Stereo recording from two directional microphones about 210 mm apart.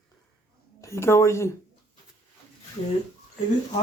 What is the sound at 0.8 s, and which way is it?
Speech, 15° left (ahead or behind).